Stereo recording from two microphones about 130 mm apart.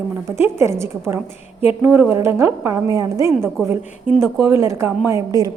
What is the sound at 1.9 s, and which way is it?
A woman's voice, 20° right (ahead or behind).